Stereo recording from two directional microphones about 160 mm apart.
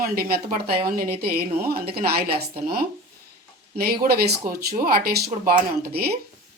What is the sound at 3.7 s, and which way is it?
Speech, 70° right (ahead or behind).